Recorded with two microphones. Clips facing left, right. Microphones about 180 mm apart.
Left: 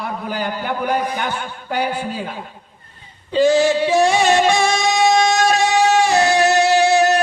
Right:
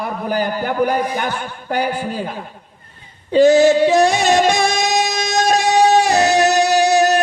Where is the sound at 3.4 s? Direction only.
45° right (ahead or behind).